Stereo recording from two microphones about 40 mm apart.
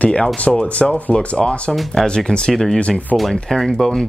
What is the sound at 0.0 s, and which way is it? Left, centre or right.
Speech, left.